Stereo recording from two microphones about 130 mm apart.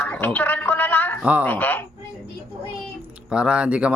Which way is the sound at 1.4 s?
15° left (ahead or behind).